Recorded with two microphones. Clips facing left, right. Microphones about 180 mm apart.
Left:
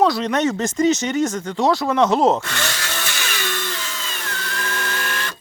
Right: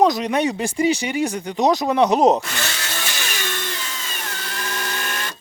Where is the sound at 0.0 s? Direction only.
15° right (ahead or behind).